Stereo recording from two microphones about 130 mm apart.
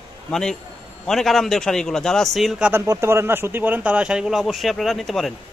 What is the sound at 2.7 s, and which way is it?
A man's voice, 20° right (ahead or behind).